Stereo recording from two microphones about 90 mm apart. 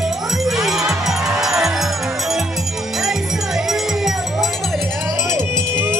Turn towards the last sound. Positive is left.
turn(degrees=-25)  # may be behind; listen again after turning